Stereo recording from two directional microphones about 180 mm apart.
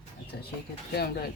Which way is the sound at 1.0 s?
60° left (ahead or behind).